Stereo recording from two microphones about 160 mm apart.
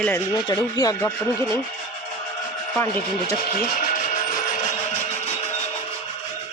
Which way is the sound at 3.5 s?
60° left (ahead or behind).